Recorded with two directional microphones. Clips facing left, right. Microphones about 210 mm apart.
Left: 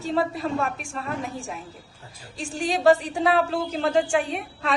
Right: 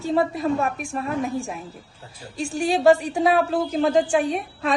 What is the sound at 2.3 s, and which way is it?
A woman's voice, 10° right (ahead or behind).